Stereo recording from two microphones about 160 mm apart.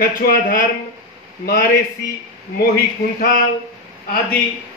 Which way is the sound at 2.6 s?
70° left (ahead or behind).